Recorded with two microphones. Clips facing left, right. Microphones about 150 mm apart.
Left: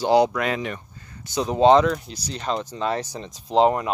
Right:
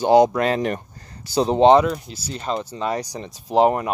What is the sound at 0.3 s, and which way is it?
Speech, 35° right (ahead or behind).